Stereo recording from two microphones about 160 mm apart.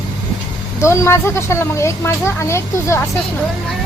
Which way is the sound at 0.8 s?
15° left (ahead or behind).